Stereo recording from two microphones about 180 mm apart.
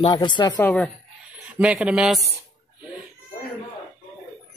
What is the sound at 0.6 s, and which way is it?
Speech, 10° left (ahead or behind).